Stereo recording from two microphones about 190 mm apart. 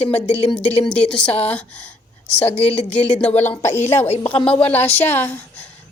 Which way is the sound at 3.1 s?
10° left (ahead or behind).